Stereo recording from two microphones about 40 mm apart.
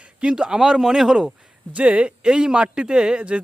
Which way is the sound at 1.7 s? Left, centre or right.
Right.